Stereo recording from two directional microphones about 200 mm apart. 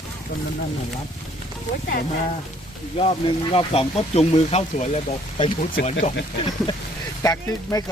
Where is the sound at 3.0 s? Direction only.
30° left (ahead or behind).